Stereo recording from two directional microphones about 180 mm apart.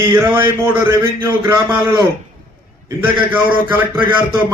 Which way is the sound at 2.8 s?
10° right (ahead or behind).